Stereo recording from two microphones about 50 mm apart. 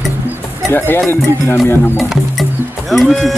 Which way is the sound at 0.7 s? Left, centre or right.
Left.